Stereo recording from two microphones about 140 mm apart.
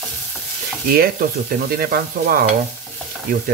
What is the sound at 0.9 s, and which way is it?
Speech, 90° right.